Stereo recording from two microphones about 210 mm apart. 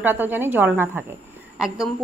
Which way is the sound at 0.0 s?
10° right (ahead or behind).